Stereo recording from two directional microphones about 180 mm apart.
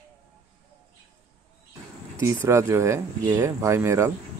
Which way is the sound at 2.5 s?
15° right (ahead or behind).